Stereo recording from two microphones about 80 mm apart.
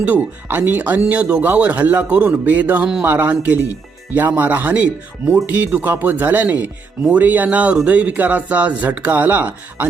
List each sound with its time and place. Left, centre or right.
0.0 s speech: right